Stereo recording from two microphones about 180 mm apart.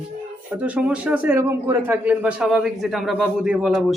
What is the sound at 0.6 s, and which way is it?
Speech, 10° right (ahead or behind).